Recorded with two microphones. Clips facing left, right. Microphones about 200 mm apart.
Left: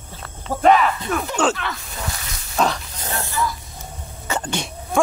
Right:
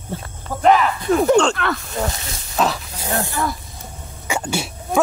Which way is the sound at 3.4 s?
60° right (ahead or behind).